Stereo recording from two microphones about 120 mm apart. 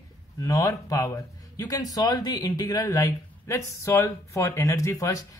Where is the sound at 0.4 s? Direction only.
30° left (ahead or behind).